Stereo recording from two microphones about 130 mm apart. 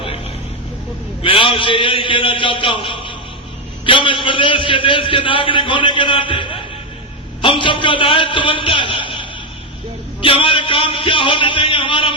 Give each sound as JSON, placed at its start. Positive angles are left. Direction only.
{"t": 1.2, "sound": "a man's voice", "side_deg": 40}